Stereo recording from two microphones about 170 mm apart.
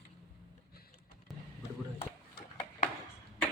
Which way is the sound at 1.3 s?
Centre (ahead or behind).